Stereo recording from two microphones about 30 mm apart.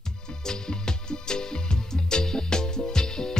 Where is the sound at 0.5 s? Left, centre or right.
Left.